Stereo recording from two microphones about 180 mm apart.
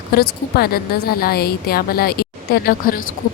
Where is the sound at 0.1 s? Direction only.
60° left (ahead or behind).